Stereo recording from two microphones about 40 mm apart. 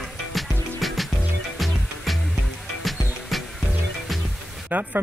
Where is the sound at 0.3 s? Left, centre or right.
Centre.